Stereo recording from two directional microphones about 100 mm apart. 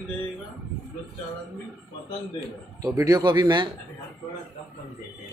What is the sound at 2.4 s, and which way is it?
A man's voice, 35° right (ahead or behind).